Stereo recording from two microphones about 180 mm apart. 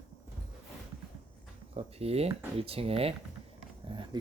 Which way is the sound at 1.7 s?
35° right (ahead or behind).